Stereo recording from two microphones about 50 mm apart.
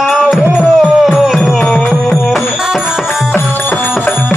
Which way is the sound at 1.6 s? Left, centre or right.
Centre.